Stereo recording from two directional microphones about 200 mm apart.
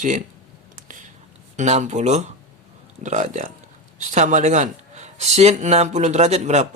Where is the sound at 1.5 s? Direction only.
35° right (ahead or behind).